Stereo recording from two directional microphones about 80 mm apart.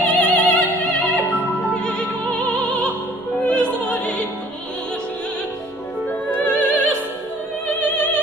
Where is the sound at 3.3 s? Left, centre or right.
Centre.